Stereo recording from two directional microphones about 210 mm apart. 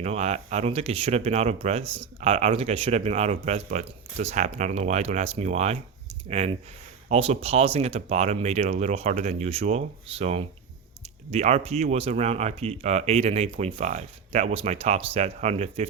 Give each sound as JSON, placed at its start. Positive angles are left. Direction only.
{"t": 0.0, "sound": "speech", "side_deg": -30}